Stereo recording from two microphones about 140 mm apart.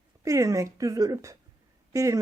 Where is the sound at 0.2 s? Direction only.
25° right (ahead or behind).